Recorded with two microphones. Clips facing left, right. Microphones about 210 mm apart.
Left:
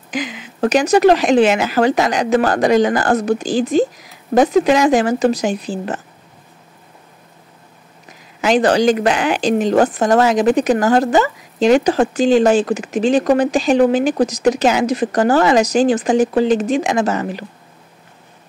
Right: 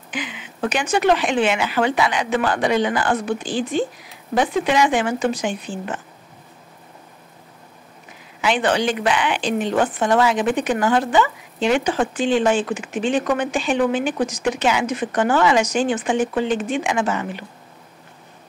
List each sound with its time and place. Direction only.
0.1 s speech: 40° left (ahead or behind)
8.4 s speech: 40° left (ahead or behind)